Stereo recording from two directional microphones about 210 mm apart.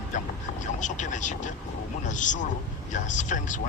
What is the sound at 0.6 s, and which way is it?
Speech, 35° left (ahead or behind).